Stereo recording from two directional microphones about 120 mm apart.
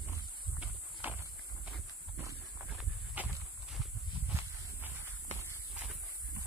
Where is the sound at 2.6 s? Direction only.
10° right (ahead or behind).